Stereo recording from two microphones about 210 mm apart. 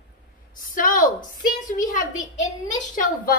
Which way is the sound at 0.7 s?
40° left (ahead or behind).